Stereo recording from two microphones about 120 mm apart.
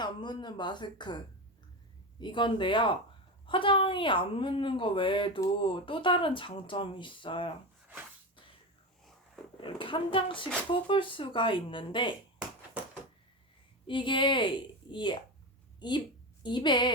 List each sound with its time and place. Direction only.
0.0 s a woman's voice: 40° left (ahead or behind)
2.2 s a woman's voice: 40° left (ahead or behind)
9.6 s a woman's voice: 45° left (ahead or behind)
13.8 s a woman's voice: 45° left (ahead or behind)